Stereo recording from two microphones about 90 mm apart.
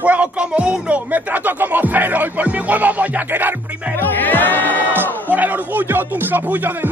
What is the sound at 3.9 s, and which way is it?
Speech, 20° left (ahead or behind).